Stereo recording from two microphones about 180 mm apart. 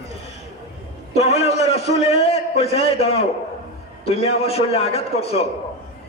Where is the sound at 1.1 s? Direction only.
35° left (ahead or behind).